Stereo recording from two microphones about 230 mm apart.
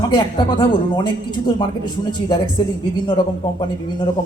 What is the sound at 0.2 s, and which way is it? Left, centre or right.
Speech, left.